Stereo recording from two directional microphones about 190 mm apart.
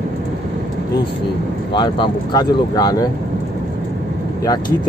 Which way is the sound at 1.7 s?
25° left (ahead or behind).